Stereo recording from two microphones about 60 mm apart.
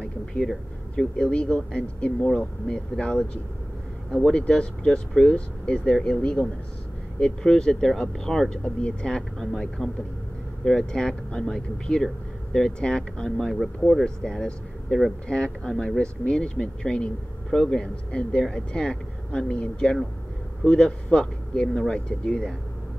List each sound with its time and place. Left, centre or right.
0.0 s a sound: centre
0.9 s speech: centre
4.3 s speech: centre